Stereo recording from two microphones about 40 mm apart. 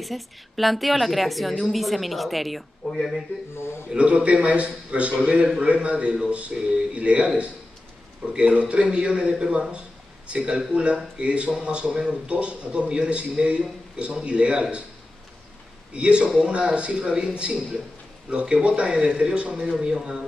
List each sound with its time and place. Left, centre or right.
0.0 s a woman's voice: centre
3.5 s a man's voice: left
3.9 s a man's voice: right
6.6 s speech: centre
6.9 s a man's voice: right
15.9 s a man's voice: right